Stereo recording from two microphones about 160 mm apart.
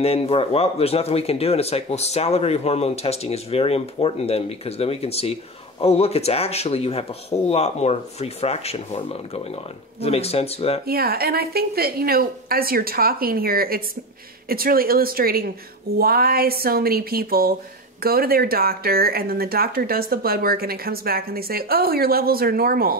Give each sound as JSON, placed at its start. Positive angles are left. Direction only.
{"t": 0.0, "sound": "speech", "side_deg": 40}
{"t": 10.9, "sound": "speech", "side_deg": -70}